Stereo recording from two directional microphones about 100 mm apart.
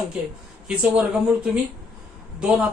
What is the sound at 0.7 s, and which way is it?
Speech, 10° right (ahead or behind).